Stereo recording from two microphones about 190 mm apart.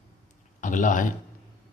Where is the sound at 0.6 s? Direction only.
45° left (ahead or behind).